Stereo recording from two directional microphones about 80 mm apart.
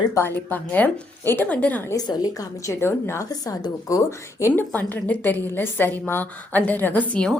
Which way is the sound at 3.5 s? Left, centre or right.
Left.